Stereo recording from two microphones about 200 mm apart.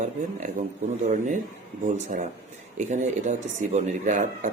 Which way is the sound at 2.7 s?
35° right (ahead or behind).